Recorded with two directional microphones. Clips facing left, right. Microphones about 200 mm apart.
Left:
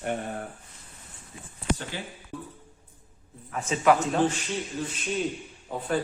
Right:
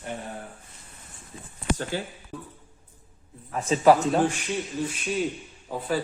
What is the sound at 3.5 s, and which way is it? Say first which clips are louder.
Speech: right 4 dB; 35° right (ahead or behind).